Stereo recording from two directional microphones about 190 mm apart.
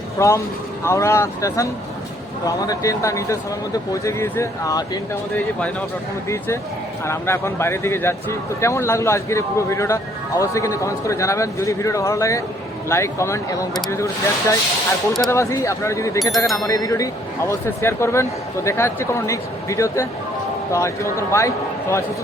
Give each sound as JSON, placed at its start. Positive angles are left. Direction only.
{"t": 0.2, "sound": "a man's voice", "side_deg": 15}
{"t": 6.2, "sound": "a man's voice", "side_deg": 15}
{"t": 15.1, "sound": "speech", "side_deg": 0}
{"t": 15.4, "sound": "a man's voice", "side_deg": 15}